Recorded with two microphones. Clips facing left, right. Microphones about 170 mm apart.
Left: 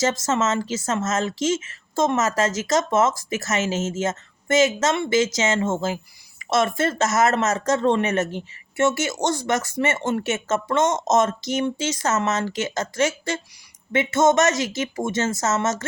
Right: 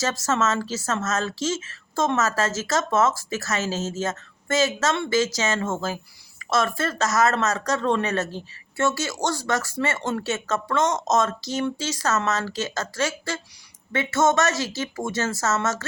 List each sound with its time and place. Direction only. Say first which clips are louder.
0.0 s speech: left 2 dB; 20° left (ahead or behind)